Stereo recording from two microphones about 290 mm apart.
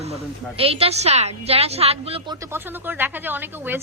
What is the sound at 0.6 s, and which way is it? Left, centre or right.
A woman's voice, centre.